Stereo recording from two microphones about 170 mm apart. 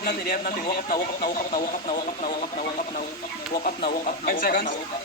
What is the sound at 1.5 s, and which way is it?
Speech, 30° left (ahead or behind).